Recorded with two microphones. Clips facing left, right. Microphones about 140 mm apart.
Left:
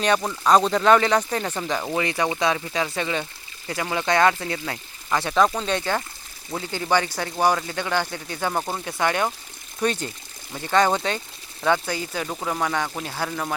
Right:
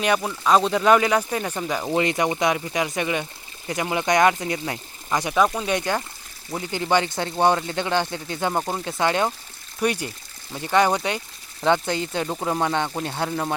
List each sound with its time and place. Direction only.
0.0 s speech: 10° right (ahead or behind)
2.0 s speech: 20° right (ahead or behind)